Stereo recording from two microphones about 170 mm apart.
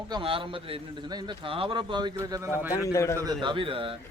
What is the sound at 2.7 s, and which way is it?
Speech, 20° left (ahead or behind).